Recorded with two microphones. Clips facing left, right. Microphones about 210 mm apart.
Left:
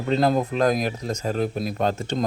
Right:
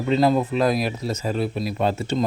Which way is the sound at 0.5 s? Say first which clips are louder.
Even; 40° left (ahead or behind).